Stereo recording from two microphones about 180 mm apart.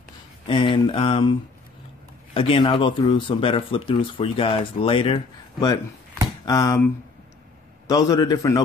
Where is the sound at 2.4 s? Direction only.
30° left (ahead or behind).